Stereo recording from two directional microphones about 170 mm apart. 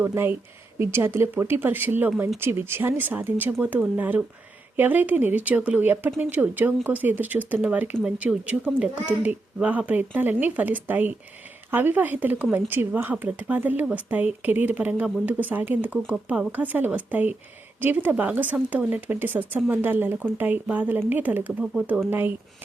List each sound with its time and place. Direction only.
0.0 s a woman's voice: 15° right (ahead or behind)